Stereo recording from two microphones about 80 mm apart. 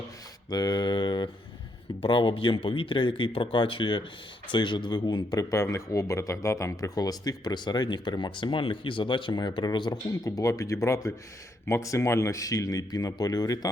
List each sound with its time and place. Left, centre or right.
0.5 s a man's voice: left
4.5 s speech: left
5.4 s speech: left
10.2 s speech: left